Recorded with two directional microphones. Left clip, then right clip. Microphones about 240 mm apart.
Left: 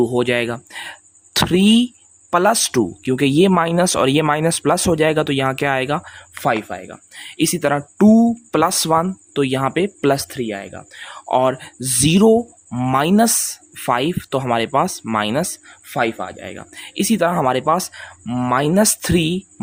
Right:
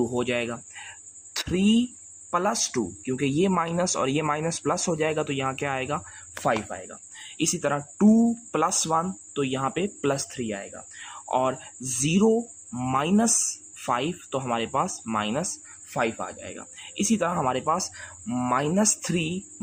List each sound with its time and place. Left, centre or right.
0.0 s speech: left